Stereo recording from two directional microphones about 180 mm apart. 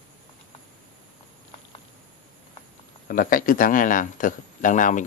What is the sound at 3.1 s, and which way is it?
Speech, 50° left (ahead or behind).